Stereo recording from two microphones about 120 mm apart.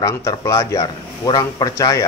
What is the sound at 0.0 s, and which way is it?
A man's voice, 25° left (ahead or behind).